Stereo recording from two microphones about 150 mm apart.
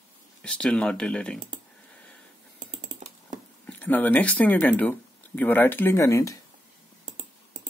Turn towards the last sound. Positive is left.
turn(degrees=-55)  # may be behind; listen again after turning